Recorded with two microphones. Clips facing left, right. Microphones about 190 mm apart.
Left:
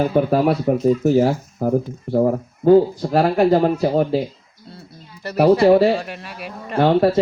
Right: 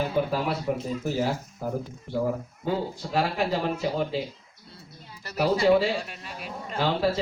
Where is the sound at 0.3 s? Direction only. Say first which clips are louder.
Left 10 dB; 55° left (ahead or behind).